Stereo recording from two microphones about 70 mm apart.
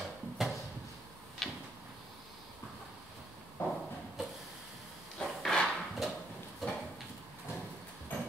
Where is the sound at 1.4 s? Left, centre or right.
Centre.